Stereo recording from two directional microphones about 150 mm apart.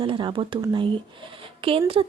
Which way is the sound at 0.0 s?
30° right (ahead or behind).